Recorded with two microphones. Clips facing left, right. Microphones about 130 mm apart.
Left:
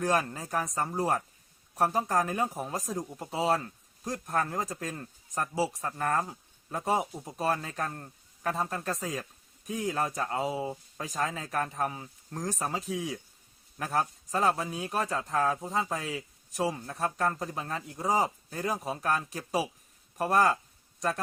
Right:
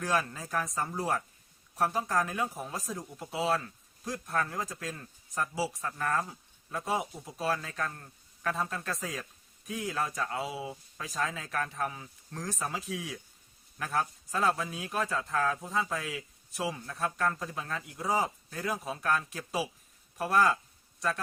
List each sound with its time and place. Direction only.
0.0 s speech: 45° left (ahead or behind)
12.9 s speech: 20° left (ahead or behind)
13.7 s a man's voice: 35° left (ahead or behind)